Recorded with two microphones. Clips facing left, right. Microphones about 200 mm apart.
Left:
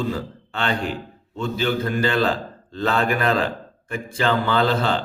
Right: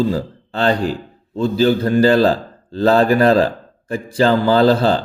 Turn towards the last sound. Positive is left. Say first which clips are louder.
# right 7 dB
turn(degrees=-35)  # may be behind; listen again after turning